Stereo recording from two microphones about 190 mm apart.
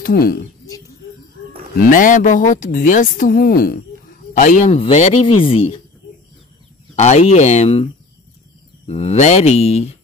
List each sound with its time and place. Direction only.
0.0 s speech: 50° left (ahead or behind)
0.7 s oink: 20° left (ahead or behind)
1.8 s speech: 45° left (ahead or behind); by 5.8 s 30° left (ahead or behind)
7.0 s speech: 35° left (ahead or behind)